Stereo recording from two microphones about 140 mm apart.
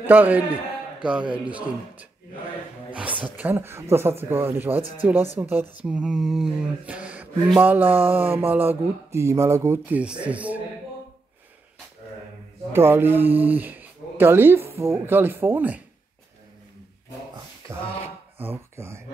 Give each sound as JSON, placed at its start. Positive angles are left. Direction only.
{"t": 0.0, "sound": "speech", "side_deg": -10}
{"t": 12.7, "sound": "speech", "side_deg": -15}
{"t": 18.4, "sound": "speech", "side_deg": -15}